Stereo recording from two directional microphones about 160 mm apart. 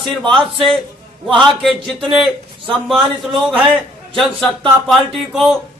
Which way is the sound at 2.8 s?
Centre (ahead or behind).